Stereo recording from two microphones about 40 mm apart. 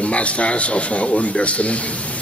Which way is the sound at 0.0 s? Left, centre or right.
Left.